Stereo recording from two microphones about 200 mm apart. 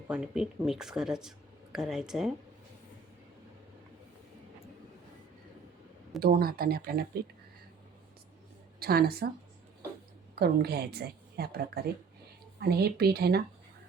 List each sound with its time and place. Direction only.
0.1 s speech: 5° right (ahead or behind)
6.1 s speech: 50° right (ahead or behind)
8.8 s speech: 50° right (ahead or behind)
10.3 s a woman's voice: 55° right (ahead or behind)